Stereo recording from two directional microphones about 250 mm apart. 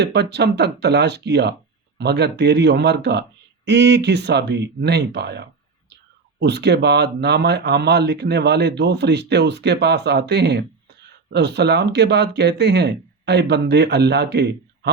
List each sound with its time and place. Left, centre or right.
0.0 s speech: right